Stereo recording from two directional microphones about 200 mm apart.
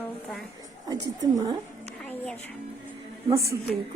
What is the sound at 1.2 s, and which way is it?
Speech, 20° right (ahead or behind).